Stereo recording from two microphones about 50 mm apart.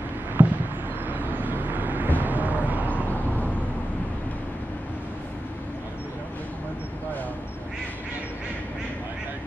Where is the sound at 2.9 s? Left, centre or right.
Left.